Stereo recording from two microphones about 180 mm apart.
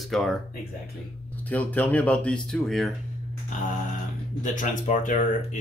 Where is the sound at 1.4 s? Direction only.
10° left (ahead or behind).